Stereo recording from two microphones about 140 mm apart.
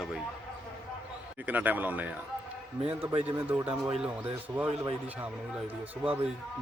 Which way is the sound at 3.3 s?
10° right (ahead or behind).